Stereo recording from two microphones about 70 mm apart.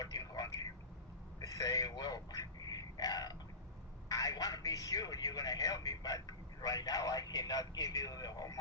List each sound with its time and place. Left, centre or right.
0.0 s telephone: left
1.4 s a sound: left
4.1 s speech: left